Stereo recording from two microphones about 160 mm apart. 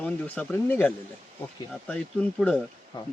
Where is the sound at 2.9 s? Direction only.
30° left (ahead or behind).